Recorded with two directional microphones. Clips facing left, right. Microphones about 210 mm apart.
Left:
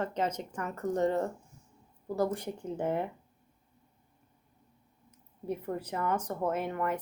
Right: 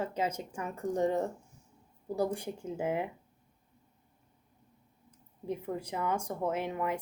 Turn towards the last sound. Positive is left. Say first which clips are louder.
# left 1 dB
turn(degrees=-10)  # may be behind; listen again after turning